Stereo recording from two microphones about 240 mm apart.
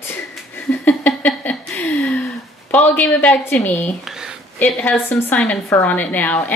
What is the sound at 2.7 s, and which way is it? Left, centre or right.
A woman's voice, centre.